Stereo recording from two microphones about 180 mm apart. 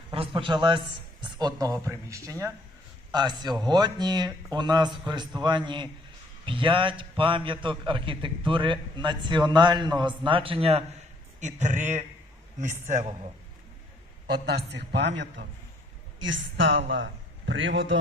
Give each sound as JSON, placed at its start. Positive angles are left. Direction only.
{"t": 0.1, "sound": "a man's voice", "side_deg": -30}
{"t": 14.4, "sound": "a man's voice", "side_deg": -70}
{"t": 16.2, "sound": "a woman's voice", "side_deg": -90}